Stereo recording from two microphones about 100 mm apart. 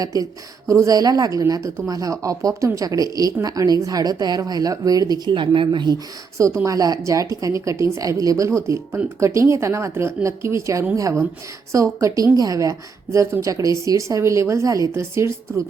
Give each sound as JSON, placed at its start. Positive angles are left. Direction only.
{"t": 0.0, "sound": "a woman's voice", "side_deg": -35}
{"t": 5.3, "sound": "a woman's voice", "side_deg": -55}
{"t": 6.3, "sound": "a woman's voice", "side_deg": -30}